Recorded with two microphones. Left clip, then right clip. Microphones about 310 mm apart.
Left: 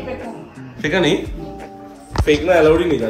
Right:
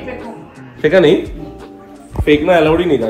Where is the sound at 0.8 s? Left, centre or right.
Centre.